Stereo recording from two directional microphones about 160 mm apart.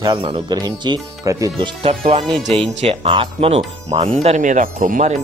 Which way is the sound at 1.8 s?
40° right (ahead or behind).